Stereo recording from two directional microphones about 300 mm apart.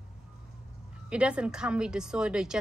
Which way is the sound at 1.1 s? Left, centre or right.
Centre.